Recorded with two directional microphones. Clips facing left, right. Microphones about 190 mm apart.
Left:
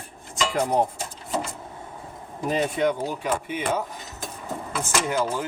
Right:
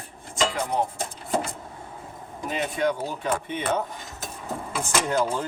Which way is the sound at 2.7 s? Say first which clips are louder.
Left 2 dB; 20° left (ahead or behind).